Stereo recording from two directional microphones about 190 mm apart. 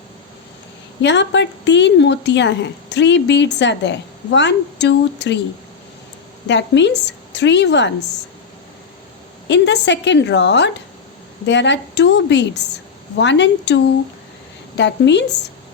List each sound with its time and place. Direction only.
1.0 s a woman's voice: 70° left (ahead or behind)
6.5 s a woman's voice: 70° left (ahead or behind)
9.5 s a woman's voice: 65° left (ahead or behind)